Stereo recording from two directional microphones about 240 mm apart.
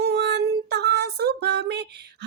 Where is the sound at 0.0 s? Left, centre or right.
Right.